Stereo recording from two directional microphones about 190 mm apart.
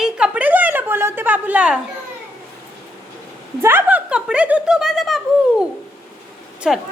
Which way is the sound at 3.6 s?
10° right (ahead or behind).